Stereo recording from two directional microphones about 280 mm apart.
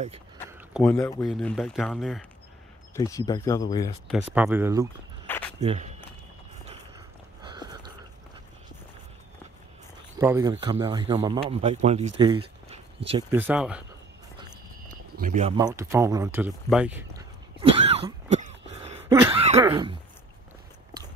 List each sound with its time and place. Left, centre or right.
0.5 s a sound: centre
0.8 s speech: centre
2.9 s speech: centre
4.3 s speech: centre
5.2 s walk: centre
5.6 s walk: right
7.4 s a sound: centre
10.1 s speech: centre
13.4 s speech: centre
15.1 s a sound: right
19.3 s throat clearing: right